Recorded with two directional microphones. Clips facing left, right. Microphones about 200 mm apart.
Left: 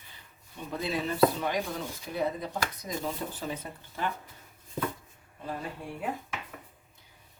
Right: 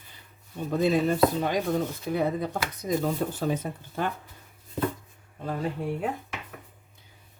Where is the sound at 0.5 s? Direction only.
45° right (ahead or behind).